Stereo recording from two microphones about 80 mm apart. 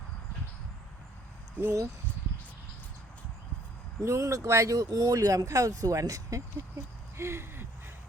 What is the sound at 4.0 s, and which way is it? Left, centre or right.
Speech, right.